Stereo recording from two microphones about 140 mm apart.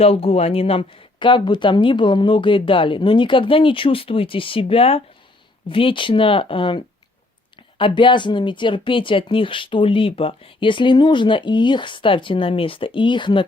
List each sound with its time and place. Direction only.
0.0 s speech: 45° left (ahead or behind)